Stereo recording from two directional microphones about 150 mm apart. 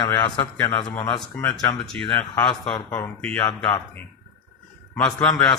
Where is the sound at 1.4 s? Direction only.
20° left (ahead or behind).